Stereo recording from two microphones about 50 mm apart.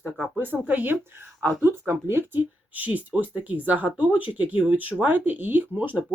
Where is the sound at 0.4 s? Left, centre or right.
Right.